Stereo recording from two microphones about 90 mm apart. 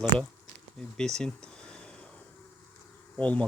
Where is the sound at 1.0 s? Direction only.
5° left (ahead or behind).